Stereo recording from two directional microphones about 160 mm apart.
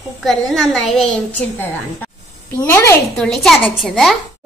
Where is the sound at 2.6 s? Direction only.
20° left (ahead or behind).